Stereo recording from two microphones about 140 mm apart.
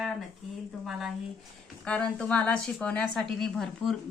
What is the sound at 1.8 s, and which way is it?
A woman's voice, 5° left (ahead or behind).